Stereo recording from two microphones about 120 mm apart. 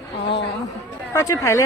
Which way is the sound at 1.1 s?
25° left (ahead or behind).